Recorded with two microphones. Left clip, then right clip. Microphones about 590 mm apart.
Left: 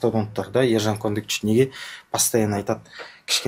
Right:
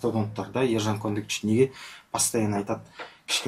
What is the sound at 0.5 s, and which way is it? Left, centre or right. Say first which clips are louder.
Speech: left 6 dB; left.